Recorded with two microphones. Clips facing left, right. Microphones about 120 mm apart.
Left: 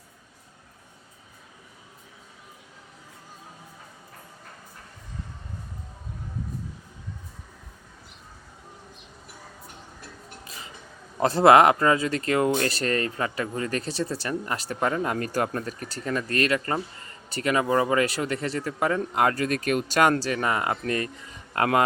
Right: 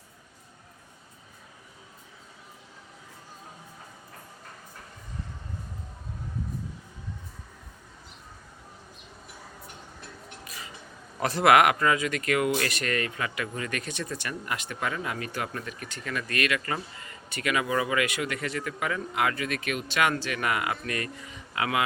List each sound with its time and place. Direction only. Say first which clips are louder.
10.4 s a sound: even; 25° left (ahead or behind)
11.2 s speech: left 4 dB; 30° left (ahead or behind)
21.5 s a man's voice: left 6 dB; 45° left (ahead or behind)